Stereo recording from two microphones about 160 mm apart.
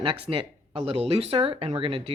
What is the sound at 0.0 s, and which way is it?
Speech, 35° right (ahead or behind).